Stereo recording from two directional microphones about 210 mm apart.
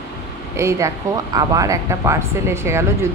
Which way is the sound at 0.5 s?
15° right (ahead or behind).